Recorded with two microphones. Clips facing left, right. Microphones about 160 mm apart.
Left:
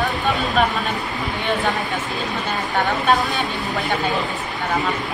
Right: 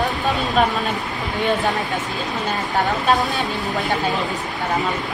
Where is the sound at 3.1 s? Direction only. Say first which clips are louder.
Even; centre (ahead or behind).